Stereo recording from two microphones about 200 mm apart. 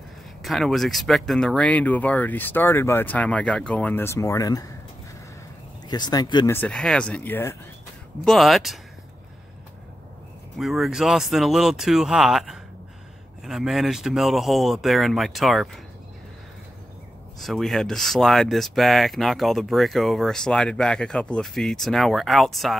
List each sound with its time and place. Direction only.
0.4 s speech: centre (ahead or behind); by 4.6 s 15° left (ahead or behind)
5.9 s speech: 20° left (ahead or behind)
6.5 s speech: 5° left (ahead or behind)
8.3 s speech: centre (ahead or behind)
10.6 s speech: centre (ahead or behind)
17.4 s speech: centre (ahead or behind)